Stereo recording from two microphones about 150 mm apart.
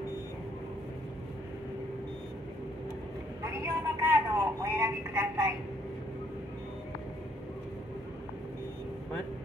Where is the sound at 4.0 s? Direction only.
15° right (ahead or behind).